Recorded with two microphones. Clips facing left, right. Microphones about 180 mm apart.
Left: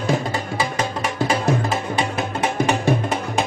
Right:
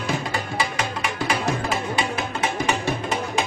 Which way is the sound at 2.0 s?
50° left (ahead or behind).